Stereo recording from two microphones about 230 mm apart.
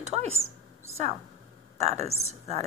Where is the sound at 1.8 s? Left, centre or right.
Right.